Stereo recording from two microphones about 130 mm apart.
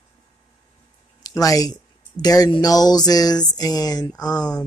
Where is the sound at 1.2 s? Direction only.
25° left (ahead or behind).